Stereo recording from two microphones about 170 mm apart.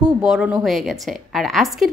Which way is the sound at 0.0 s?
5° right (ahead or behind).